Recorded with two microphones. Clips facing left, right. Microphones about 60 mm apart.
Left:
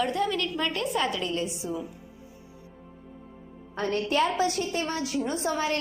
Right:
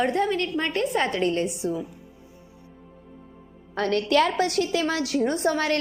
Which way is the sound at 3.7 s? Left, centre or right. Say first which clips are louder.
Right 5 dB; right.